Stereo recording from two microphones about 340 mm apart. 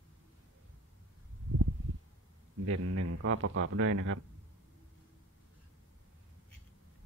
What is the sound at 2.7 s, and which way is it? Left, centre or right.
Speech, right.